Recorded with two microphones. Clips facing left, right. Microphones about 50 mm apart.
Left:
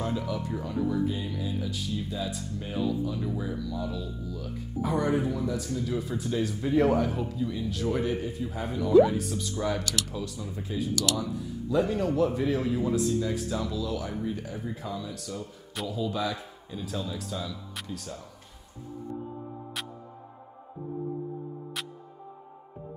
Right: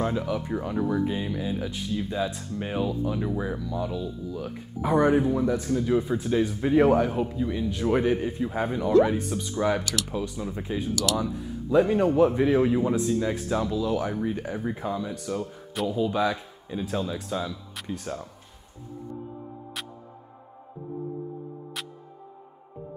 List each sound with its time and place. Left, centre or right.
0.0 s a man's voice: right
21.8 s music: centre